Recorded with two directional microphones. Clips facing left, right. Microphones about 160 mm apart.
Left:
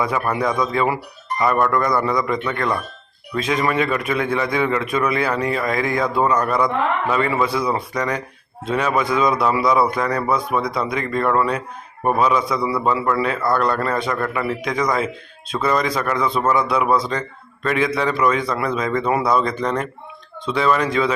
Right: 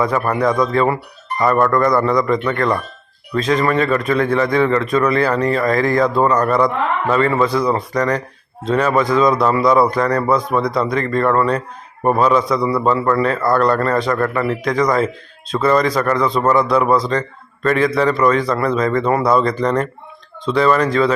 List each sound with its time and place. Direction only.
0.0 s a man's voice: 5° left (ahead or behind)